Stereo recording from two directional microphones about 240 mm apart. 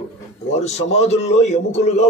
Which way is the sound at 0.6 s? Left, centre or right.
Left.